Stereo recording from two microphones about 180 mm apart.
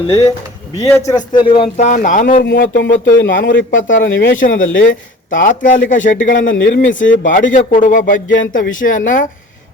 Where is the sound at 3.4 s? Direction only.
90° left.